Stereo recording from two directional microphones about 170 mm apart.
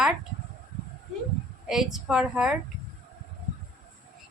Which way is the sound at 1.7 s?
Centre (ahead or behind).